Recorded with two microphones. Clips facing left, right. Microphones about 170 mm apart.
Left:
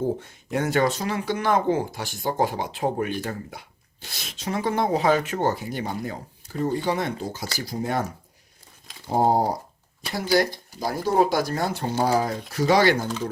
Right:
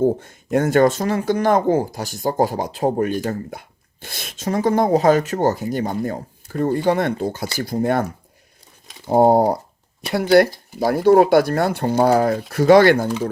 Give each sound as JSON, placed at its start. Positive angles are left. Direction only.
{"t": 0.0, "sound": "speech", "side_deg": -45}
{"t": 9.0, "sound": "speech", "side_deg": -60}